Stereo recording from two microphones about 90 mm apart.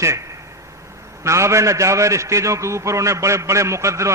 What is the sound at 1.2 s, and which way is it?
A man's voice, 35° right (ahead or behind).